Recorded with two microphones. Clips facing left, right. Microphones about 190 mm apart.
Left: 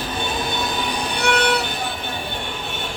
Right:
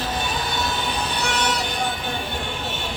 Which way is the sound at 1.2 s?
60° left (ahead or behind).